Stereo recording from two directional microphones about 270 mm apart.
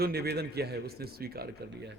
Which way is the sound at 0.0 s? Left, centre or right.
Right.